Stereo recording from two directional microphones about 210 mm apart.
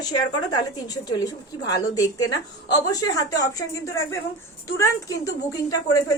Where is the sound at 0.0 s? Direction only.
20° left (ahead or behind).